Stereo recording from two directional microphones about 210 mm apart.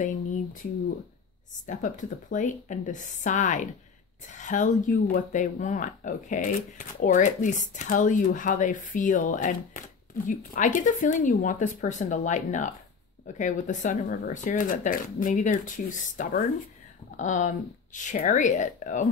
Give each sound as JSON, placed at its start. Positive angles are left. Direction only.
{"t": 0.0, "sound": "speech", "side_deg": 40}
{"t": 1.7, "sound": "speech", "side_deg": 40}